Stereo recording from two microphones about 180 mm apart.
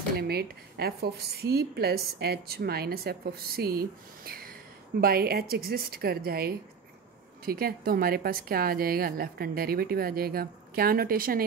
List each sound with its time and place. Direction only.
0.2 s a woman's voice: 60° right (ahead or behind)